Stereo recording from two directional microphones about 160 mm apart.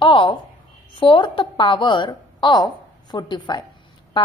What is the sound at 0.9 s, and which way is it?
A woman's voice, 30° left (ahead or behind).